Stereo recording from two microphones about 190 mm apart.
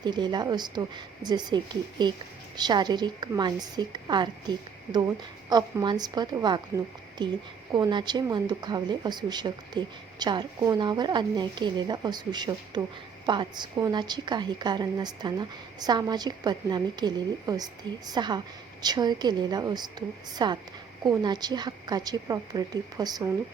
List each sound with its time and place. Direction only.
0.0 s a woman's voice: 25° right (ahead or behind)